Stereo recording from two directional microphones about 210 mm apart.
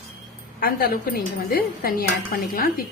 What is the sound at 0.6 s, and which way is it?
Speech, 45° left (ahead or behind).